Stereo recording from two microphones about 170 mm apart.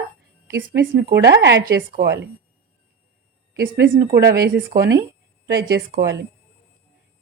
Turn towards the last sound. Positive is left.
turn(degrees=-65)  # may be behind; listen again after turning